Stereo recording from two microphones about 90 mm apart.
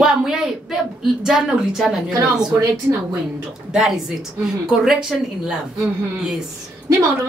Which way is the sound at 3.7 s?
5° right (ahead or behind).